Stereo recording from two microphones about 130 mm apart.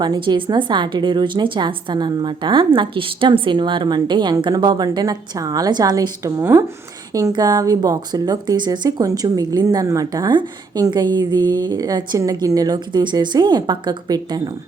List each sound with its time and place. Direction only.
0.0 s speech: 35° right (ahead or behind)